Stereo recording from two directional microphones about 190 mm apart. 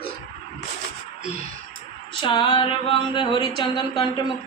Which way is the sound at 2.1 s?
25° left (ahead or behind).